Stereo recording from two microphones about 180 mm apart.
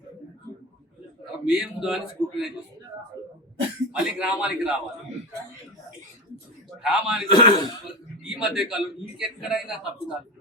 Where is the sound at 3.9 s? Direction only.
5° right (ahead or behind).